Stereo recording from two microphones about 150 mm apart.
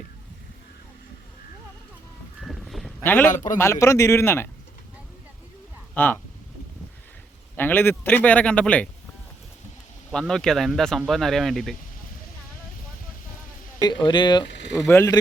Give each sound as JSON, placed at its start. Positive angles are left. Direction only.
{"t": 2.4, "sound": "a sound", "side_deg": 0}
{"t": 3.0, "sound": "a man's voice", "side_deg": 15}
{"t": 3.2, "sound": "a man's voice", "side_deg": 60}
{"t": 3.6, "sound": "a man's voice", "side_deg": 20}
{"t": 5.9, "sound": "speech", "side_deg": 10}
{"t": 7.5, "sound": "a man's voice", "side_deg": 15}
{"t": 10.1, "sound": "speech", "side_deg": 5}
{"t": 13.8, "sound": "speech", "side_deg": 30}
{"t": 14.8, "sound": "a man's voice", "side_deg": 15}